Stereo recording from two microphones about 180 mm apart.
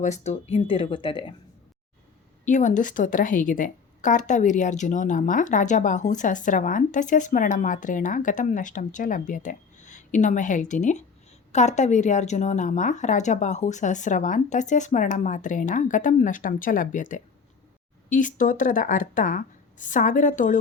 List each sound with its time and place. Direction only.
0.0 s speech: 40° left (ahead or behind)
2.4 s a woman's voice: 45° left (ahead or behind)